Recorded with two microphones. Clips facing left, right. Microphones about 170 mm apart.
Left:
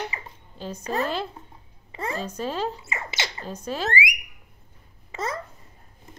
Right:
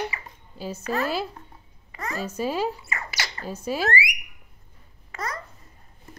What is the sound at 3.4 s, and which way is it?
Speech, 10° right (ahead or behind).